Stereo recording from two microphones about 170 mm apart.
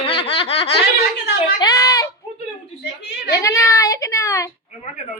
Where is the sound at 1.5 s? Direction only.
20° left (ahead or behind).